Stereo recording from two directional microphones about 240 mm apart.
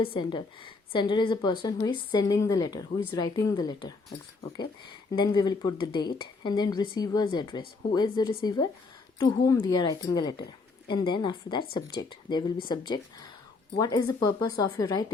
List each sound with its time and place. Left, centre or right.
0.0 s a woman's voice: left
5.1 s a woman's voice: centre